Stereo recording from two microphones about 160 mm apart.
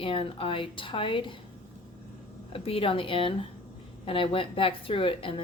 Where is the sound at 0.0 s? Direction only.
35° left (ahead or behind).